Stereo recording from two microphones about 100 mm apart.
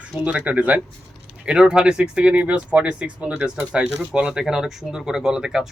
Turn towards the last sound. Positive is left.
turn(degrees=-5)  # may be behind; listen again after turning